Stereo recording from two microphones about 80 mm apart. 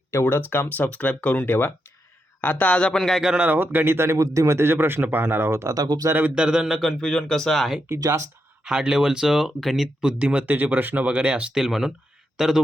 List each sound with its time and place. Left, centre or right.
0.1 s a man's voice: left; by 5.7 s right
5.7 s speech: right
6.1 s a man's voice: right
6.3 s speech: centre
7.9 s speech: right
8.6 s speech: centre